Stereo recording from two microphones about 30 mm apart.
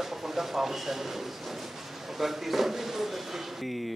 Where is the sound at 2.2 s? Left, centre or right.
Centre.